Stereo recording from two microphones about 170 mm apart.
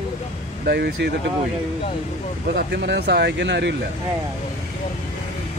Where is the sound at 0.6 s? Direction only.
80° right.